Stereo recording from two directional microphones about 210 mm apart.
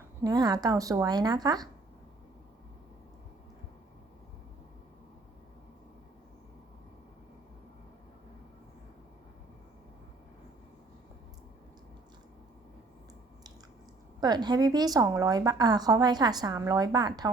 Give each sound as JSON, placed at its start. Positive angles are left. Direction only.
{"t": 0.2, "sound": "speech", "side_deg": -20}
{"t": 14.2, "sound": "a woman's voice", "side_deg": -20}